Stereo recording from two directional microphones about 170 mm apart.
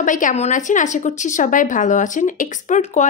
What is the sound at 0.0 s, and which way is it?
Speech, 50° left (ahead or behind).